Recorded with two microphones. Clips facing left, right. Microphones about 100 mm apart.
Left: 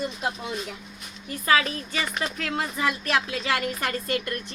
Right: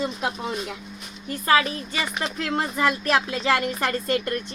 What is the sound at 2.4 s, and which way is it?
A woman's voice, 30° right (ahead or behind).